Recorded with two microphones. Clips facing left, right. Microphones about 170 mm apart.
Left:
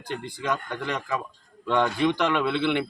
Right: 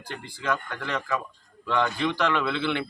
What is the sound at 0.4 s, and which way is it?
A man's voice, 15° left (ahead or behind).